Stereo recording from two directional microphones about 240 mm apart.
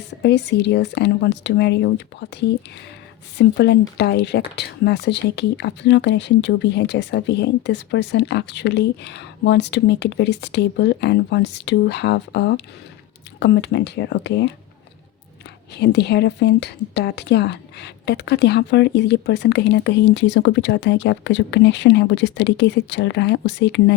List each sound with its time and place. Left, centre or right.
0.2 s speech: left
3.3 s speech: left
15.7 s speech: left